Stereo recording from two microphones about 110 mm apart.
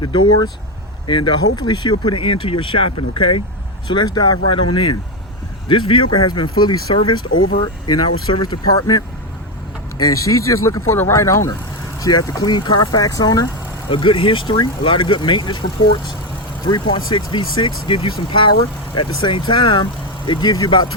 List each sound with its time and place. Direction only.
1.0 s speech: 45° left (ahead or behind)
3.9 s speech: 40° left (ahead or behind)
10.1 s speech: 30° left (ahead or behind)
13.9 s speech: 50° left (ahead or behind)
16.6 s speech: 45° left (ahead or behind)